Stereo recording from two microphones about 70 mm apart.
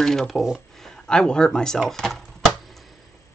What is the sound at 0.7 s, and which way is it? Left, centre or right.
Typewriter, centre.